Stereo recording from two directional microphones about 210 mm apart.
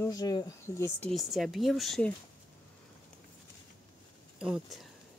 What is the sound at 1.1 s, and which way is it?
Speech, centre (ahead or behind).